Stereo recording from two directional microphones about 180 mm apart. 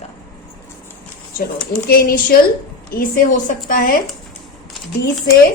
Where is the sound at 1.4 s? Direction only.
60° left (ahead or behind).